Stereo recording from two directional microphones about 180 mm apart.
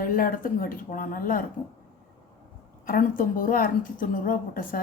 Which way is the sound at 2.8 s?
50° left (ahead or behind).